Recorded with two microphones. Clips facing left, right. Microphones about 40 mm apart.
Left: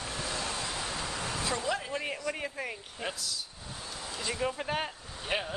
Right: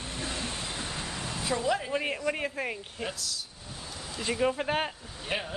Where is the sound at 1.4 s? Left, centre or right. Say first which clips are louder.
Right 5 dB; centre.